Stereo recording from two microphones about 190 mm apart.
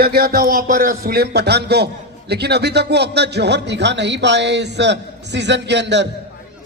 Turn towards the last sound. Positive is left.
turn(degrees=-65)  # may be behind; listen again after turning